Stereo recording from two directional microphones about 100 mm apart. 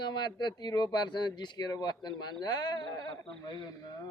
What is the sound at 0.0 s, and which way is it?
Speech, 45° left (ahead or behind).